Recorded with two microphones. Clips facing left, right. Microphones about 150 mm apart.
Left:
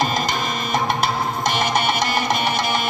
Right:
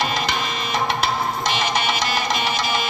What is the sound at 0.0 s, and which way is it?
Music, 45° left (ahead or behind).